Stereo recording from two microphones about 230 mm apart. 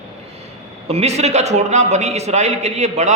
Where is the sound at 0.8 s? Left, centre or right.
Right.